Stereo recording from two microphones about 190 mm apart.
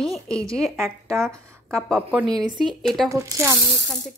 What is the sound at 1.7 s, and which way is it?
Speech, centre (ahead or behind).